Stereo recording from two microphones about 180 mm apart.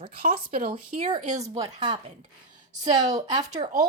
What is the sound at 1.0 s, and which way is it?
Speech, 35° right (ahead or behind).